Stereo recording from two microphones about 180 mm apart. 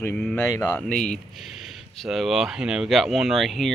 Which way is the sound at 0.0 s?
5° left (ahead or behind).